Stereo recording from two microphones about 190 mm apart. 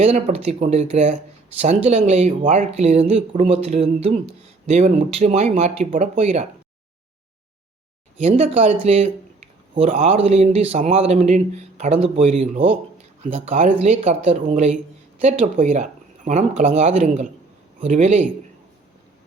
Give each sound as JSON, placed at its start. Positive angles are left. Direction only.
{"t": 0.0, "sound": "speech", "side_deg": -35}
{"t": 8.2, "sound": "speech", "side_deg": -35}